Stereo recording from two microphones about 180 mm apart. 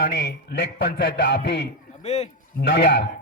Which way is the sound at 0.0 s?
65° left (ahead or behind).